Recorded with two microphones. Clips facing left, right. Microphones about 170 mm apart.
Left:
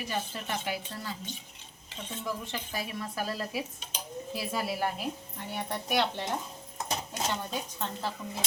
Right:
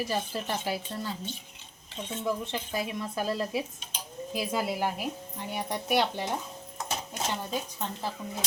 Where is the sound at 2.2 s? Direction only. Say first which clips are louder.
Right 5 dB; 20° right (ahead or behind).